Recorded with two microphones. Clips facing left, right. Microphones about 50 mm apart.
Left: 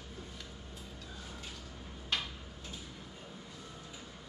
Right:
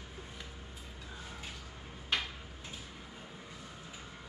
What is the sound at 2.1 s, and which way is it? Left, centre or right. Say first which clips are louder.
Tick-tock: right 2 dB; centre.